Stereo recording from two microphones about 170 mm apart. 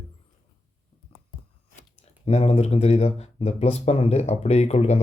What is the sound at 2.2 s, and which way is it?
Speech, 40° left (ahead or behind).